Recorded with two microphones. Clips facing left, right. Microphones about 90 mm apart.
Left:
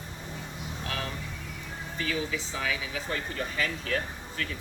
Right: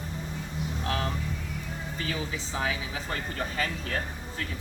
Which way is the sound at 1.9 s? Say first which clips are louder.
Left 3 dB; 30° right (ahead or behind).